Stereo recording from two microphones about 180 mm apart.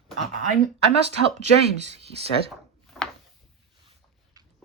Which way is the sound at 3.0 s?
Centre (ahead or behind).